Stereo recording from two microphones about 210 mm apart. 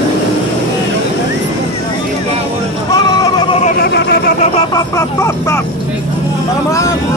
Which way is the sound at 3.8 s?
50° left (ahead or behind).